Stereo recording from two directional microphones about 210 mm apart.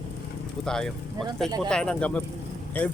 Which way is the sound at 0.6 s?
5° left (ahead or behind).